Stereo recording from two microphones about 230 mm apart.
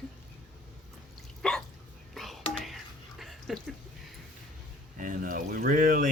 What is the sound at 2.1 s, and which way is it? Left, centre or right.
Whispering, centre.